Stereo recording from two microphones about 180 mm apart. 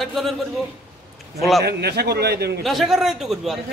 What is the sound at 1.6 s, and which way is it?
A man's voice, 65° right (ahead or behind).